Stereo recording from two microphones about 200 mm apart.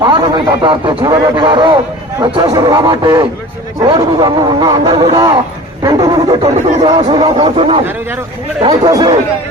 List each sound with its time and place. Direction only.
0.0 s speech: 25° right (ahead or behind)